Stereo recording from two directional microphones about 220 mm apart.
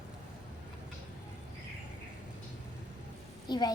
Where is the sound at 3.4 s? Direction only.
20° left (ahead or behind).